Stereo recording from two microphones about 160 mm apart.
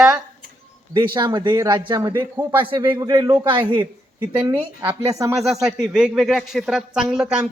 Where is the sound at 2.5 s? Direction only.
30° right (ahead or behind).